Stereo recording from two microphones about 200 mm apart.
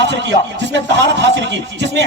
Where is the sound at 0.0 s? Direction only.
60° right (ahead or behind).